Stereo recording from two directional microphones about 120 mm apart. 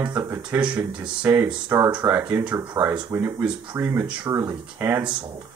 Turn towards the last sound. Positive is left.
turn(degrees=-15)  # may be behind; listen again after turning